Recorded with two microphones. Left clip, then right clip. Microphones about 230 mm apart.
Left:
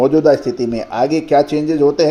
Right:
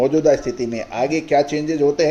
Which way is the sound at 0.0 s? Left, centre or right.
Left.